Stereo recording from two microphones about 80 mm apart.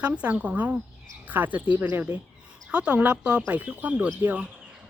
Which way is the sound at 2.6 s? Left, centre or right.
Centre.